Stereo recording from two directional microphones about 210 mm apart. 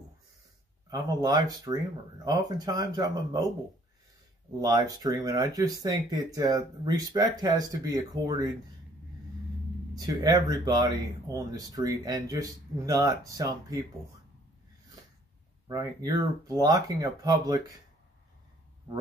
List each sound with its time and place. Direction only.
0.8 s speech: 15° right (ahead or behind)
4.6 s speech: 20° right (ahead or behind)
9.9 s speech: 15° right (ahead or behind)
15.7 s speech: 15° right (ahead or behind)